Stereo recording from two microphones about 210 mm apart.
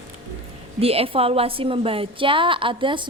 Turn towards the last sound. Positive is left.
turn(degrees=-25)  # may be behind; listen again after turning